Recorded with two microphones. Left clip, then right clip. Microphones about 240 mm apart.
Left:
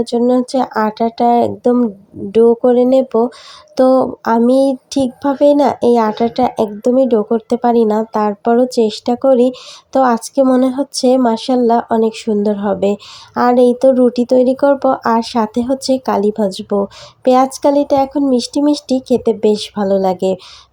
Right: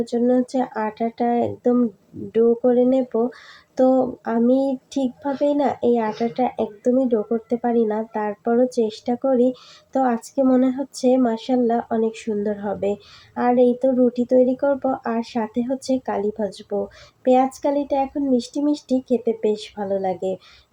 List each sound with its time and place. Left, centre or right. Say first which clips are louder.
0.0 s speech: left 6 dB; left